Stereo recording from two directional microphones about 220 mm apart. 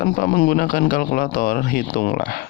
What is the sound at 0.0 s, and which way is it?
Speech, 40° left (ahead or behind).